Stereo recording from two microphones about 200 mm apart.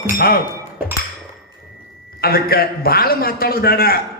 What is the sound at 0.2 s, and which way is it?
Speech, 50° left (ahead or behind).